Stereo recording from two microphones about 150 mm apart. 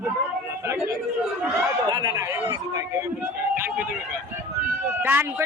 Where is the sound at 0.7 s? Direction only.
15° right (ahead or behind).